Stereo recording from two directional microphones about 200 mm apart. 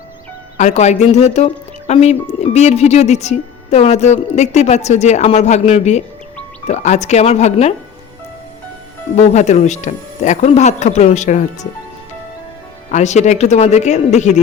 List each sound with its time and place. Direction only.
0.5 s speech: 35° left (ahead or behind)
9.1 s speech: 35° left (ahead or behind)
12.9 s speech: 35° left (ahead or behind)